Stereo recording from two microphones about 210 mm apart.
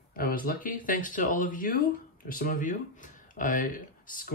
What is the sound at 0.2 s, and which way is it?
Speech, 45° left (ahead or behind).